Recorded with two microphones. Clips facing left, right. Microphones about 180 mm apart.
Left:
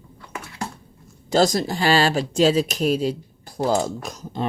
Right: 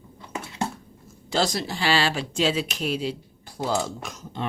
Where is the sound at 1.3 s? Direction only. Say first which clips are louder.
Left 6 dB; 45° left (ahead or behind).